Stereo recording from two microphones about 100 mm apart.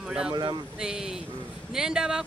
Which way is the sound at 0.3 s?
45° right (ahead or behind).